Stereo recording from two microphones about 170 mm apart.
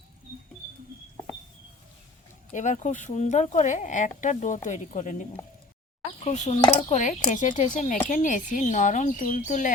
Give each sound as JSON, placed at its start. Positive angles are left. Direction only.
{"t": 2.5, "sound": "speech", "side_deg": 45}
{"t": 6.6, "sound": "speech", "side_deg": 30}